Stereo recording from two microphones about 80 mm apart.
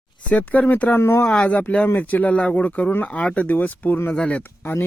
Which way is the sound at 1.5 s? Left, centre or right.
Centre.